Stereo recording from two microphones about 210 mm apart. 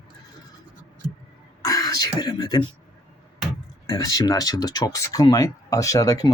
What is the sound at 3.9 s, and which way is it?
Speech, 15° left (ahead or behind).